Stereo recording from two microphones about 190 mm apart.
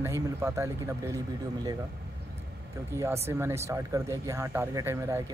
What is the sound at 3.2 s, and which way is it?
Speech, 15° right (ahead or behind).